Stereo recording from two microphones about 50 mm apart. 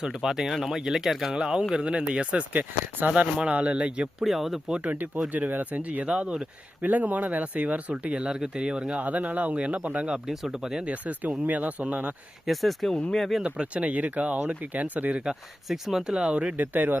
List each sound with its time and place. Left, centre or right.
0.0 s speech: centre; by 3.1 s right
3.1 s speech: centre
4.2 s speech: centre
4.7 s speech: right
6.1 s speech: centre
6.8 s speech: right; by 9.0 s centre
9.0 s speech: right
10.2 s speech: centre
10.8 s speech: right
12.5 s speech: centre
13.0 s speech: centre
13.4 s speech: right
15.2 s speech: centre
16.6 s speech: right